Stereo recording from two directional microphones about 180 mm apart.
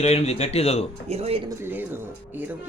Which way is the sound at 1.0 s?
35° right (ahead or behind).